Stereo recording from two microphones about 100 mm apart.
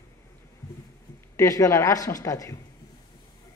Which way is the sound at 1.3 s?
35° left (ahead or behind).